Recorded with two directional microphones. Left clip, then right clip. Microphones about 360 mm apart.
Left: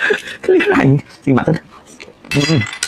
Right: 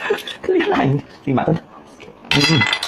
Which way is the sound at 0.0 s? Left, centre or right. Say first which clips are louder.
Left 5 dB; left.